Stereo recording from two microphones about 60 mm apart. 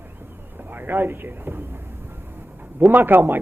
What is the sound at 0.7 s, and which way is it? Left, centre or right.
Speech, right.